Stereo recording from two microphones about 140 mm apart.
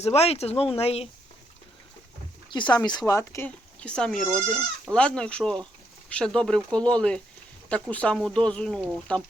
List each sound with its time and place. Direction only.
0.0 s speech: 45° left (ahead or behind)
2.5 s speech: 35° left (ahead or behind)
3.1 s speech: 20° left (ahead or behind)
3.8 s speech: 5° left (ahead or behind)